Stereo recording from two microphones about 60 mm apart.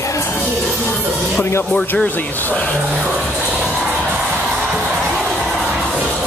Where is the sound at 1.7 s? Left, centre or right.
Left.